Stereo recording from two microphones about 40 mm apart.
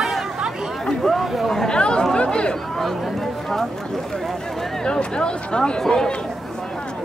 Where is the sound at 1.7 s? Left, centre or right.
Left.